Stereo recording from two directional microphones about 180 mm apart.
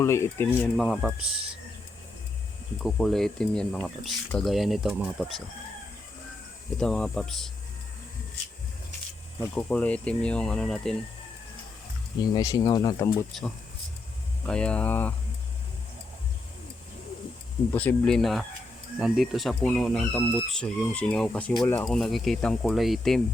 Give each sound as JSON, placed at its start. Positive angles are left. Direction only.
{"t": 0.0, "sound": "speech", "side_deg": 15}
{"t": 0.8, "sound": "speech", "side_deg": 0}
{"t": 2.8, "sound": "speech", "side_deg": 0}
{"t": 6.7, "sound": "speech", "side_deg": 5}
{"t": 9.4, "sound": "speech", "side_deg": 10}
{"t": 12.2, "sound": "speech", "side_deg": 20}
{"t": 14.4, "sound": "speech", "side_deg": 5}
{"t": 17.7, "sound": "speech", "side_deg": 10}